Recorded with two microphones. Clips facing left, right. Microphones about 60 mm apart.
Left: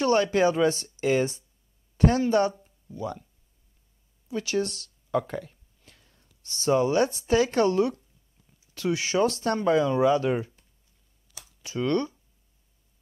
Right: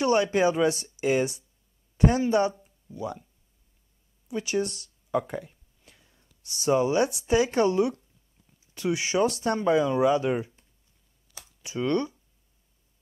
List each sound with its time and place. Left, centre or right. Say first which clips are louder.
0.0 s speech: left 1 dB; centre
4.3 s speech: even; centre
11.3 s a sound: left 1 dB; right